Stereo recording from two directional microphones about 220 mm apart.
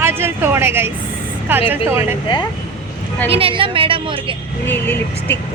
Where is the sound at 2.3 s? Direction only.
20° left (ahead or behind).